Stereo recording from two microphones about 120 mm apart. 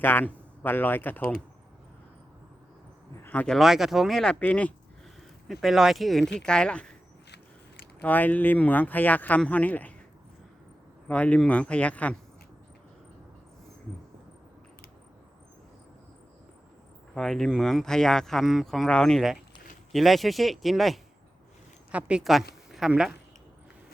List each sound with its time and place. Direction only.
0.0 s speech: 15° left (ahead or behind)
3.2 s speech: 15° left (ahead or behind)
3.5 s speech: 5° right (ahead or behind)
5.5 s speech: centre (ahead or behind)
8.0 s speech: 15° left (ahead or behind)
11.1 s speech: 10° left (ahead or behind)
17.2 s a woman's voice: 5° left (ahead or behind)